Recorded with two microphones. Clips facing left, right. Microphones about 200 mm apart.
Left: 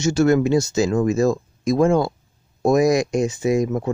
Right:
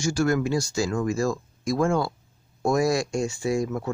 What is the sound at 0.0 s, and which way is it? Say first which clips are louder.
Speech: left 7 dB; 25° left (ahead or behind).